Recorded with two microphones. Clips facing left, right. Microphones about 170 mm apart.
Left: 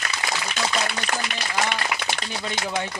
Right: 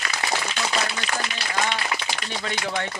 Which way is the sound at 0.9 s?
60° left (ahead or behind).